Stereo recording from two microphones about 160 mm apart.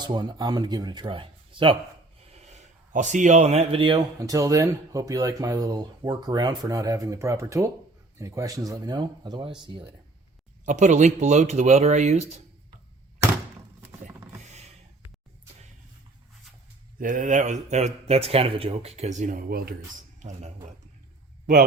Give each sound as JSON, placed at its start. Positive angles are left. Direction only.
{"t": 0.0, "sound": "speech", "side_deg": -25}
{"t": 2.3, "sound": "speech", "side_deg": -45}
{"t": 4.2, "sound": "speech", "side_deg": -20}
{"t": 10.7, "sound": "speech", "side_deg": -50}
{"t": 17.0, "sound": "speech", "side_deg": -55}
{"t": 20.1, "sound": "speech", "side_deg": -50}
{"t": 21.4, "sound": "speech", "side_deg": -60}